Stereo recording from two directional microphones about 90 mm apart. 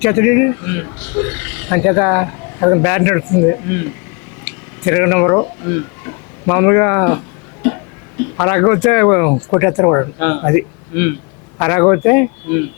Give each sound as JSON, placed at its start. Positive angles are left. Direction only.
{"t": 0.0, "sound": "speech", "side_deg": 15}
{"t": 4.4, "sound": "a sound", "side_deg": 20}
{"t": 6.4, "sound": "speech", "side_deg": 20}
{"t": 8.4, "sound": "speech", "side_deg": 20}